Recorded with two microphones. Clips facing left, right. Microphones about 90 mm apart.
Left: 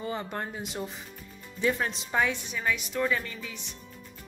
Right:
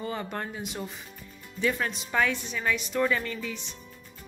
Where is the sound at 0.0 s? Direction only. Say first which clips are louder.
Even; 20° left (ahead or behind).